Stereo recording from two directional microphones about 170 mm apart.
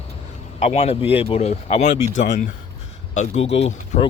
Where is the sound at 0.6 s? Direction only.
35° left (ahead or behind).